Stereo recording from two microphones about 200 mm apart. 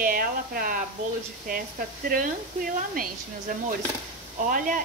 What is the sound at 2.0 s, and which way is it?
A woman's voice, 45° right (ahead or behind).